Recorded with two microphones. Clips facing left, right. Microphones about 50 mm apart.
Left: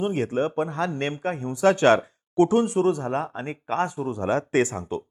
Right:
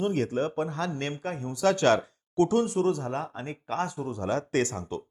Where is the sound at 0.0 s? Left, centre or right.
Centre.